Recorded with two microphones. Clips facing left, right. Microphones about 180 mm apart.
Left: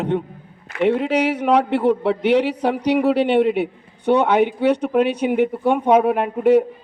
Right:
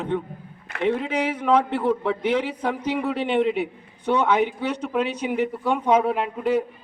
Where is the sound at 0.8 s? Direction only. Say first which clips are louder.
Left 5 dB; 75° left (ahead or behind).